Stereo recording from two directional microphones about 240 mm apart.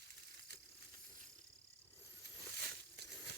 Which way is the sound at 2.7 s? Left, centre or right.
Right.